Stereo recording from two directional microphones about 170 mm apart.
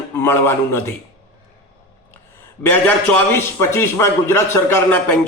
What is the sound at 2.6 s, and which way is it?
A man's voice, 10° left (ahead or behind).